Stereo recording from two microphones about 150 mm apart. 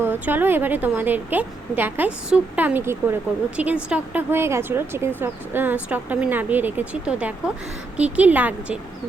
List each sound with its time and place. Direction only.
0.0 s a woman's voice: 15° right (ahead or behind)